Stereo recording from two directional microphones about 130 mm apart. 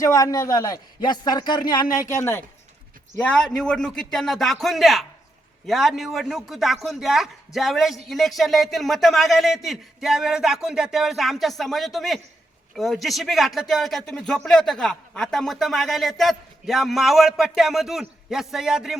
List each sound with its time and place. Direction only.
0.0 s a man's voice: 25° left (ahead or behind)
3.2 s a man's voice: 10° left (ahead or behind)